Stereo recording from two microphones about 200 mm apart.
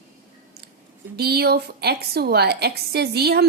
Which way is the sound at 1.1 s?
50° right (ahead or behind).